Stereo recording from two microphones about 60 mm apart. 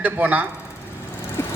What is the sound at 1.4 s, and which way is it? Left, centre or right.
Lawn mower, left.